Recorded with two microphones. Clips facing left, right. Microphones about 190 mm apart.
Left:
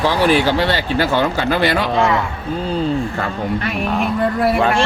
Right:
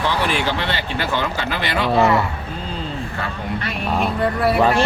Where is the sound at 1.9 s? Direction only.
5° right (ahead or behind).